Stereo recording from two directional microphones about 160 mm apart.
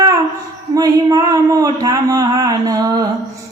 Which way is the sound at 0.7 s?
25° right (ahead or behind).